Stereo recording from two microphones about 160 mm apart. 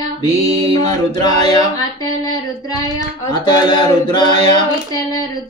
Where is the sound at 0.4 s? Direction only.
25° left (ahead or behind).